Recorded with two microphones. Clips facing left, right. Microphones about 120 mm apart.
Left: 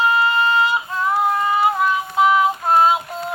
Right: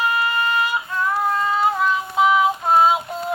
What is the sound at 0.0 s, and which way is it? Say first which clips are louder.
Female singing: left 4 dB; 25° left (ahead or behind).